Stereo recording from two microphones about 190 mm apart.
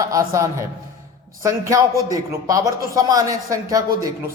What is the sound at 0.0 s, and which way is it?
A man's voice, 15° right (ahead or behind).